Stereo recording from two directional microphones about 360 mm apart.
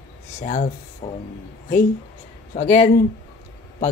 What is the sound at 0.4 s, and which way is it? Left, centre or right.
Speech, left.